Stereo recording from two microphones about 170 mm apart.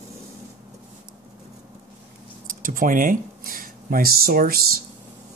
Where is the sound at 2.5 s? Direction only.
55° right (ahead or behind).